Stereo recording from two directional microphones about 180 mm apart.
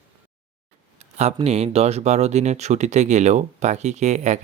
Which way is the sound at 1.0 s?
35° right (ahead or behind).